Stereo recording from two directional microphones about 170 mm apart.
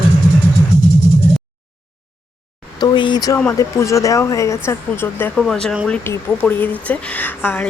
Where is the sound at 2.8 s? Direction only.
25° left (ahead or behind).